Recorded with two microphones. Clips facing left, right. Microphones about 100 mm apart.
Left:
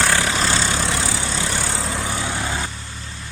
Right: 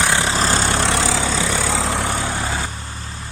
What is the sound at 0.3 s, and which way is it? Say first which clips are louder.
Vehicle: right 2 dB; 35° right (ahead or behind).